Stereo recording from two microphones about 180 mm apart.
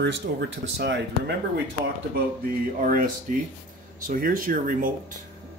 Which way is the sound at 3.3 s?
45° right (ahead or behind).